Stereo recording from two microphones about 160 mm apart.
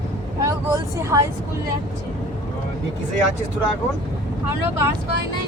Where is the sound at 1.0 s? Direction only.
20° right (ahead or behind).